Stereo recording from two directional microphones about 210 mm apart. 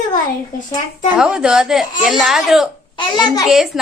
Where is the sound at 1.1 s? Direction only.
5° right (ahead or behind).